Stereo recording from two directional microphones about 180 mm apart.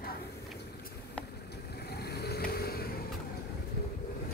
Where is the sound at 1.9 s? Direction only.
65° left (ahead or behind).